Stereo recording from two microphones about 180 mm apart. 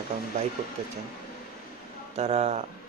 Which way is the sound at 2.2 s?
35° right (ahead or behind).